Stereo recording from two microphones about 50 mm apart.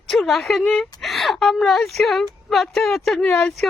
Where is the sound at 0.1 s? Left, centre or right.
Centre.